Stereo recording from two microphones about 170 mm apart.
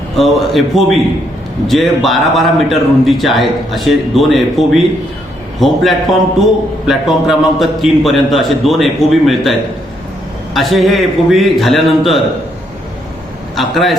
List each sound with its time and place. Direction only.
0.2 s a man's voice: centre (ahead or behind)
13.6 s a man's voice: centre (ahead or behind)